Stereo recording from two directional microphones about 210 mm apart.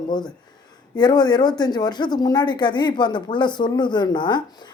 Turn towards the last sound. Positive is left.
turn(degrees=20)  # may be behind; listen again after turning